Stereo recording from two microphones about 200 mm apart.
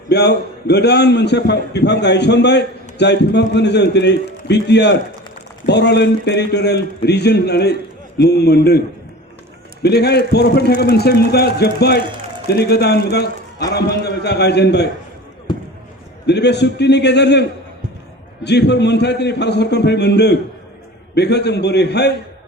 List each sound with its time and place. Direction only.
0.1 s a man's voice: 55° left (ahead or behind)
9.8 s a man's voice: 55° left (ahead or behind)
16.2 s a man's voice: 60° left (ahead or behind)
18.4 s a man's voice: 60° left (ahead or behind)